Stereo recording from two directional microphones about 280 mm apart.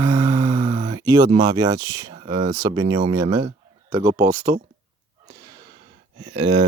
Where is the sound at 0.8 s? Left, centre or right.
Centre.